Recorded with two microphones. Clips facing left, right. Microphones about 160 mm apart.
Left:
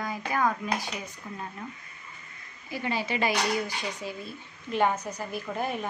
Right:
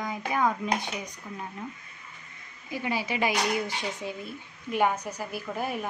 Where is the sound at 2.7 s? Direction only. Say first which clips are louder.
Even; 10° right (ahead or behind).